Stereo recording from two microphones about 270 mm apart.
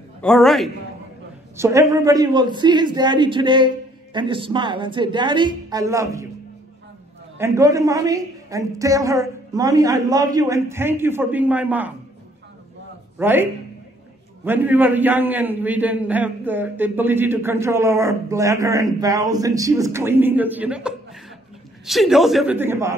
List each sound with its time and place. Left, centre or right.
0.2 s a man's voice: centre
1.6 s a man's voice: centre
7.3 s a man's voice: centre
13.2 s a man's voice: centre